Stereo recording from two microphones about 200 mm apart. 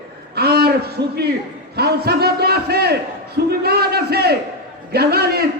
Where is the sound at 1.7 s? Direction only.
55° right (ahead or behind).